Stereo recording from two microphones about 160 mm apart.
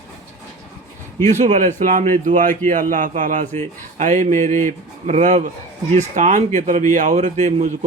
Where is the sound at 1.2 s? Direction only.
45° right (ahead or behind).